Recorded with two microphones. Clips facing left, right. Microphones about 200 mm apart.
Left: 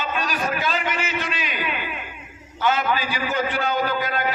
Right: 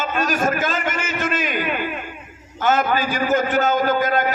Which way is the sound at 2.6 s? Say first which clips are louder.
Right 3 dB; 45° right (ahead or behind).